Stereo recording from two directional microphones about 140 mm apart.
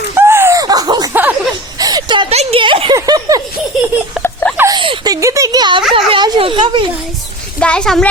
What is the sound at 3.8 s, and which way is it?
Laughter, 5° right (ahead or behind).